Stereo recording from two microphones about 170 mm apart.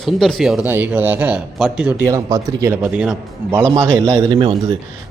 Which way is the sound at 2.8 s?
5° right (ahead or behind).